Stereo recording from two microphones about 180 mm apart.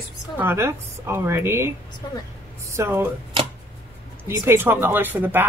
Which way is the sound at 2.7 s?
15° right (ahead or behind).